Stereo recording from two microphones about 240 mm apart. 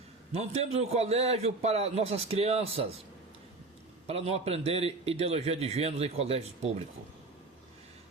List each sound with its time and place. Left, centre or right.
0.3 s a man's voice: right
4.0 s a man's voice: right